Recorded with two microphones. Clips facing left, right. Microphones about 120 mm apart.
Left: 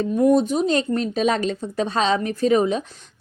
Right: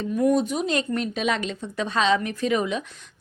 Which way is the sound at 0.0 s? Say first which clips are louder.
Left 4 dB; 30° left (ahead or behind).